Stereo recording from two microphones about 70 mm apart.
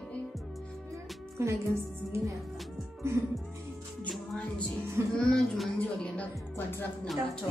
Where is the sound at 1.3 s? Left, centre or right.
Right.